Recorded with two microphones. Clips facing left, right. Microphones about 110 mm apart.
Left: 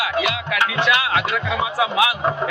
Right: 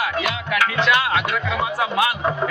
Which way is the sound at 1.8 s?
5° left (ahead or behind).